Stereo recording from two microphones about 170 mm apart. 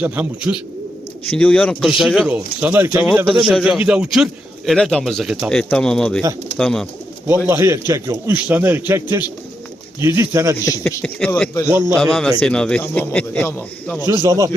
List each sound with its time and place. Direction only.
0.0 s a man's voice: 10° right (ahead or behind)
1.3 s a man's voice: 5° left (ahead or behind)
7.3 s a man's voice: 15° right (ahead or behind)
10.6 s speech: 20° left (ahead or behind)
11.0 s a man's voice: 5° left (ahead or behind)
11.7 s a man's voice: 15° right (ahead or behind)
11.9 s a man's voice: 5° left (ahead or behind)
14.1 s speech: 20° right (ahead or behind)